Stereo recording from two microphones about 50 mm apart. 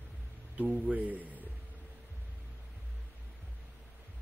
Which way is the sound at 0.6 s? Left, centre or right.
Right.